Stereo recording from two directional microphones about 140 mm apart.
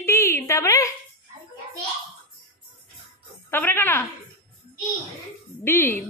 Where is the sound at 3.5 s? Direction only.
15° left (ahead or behind).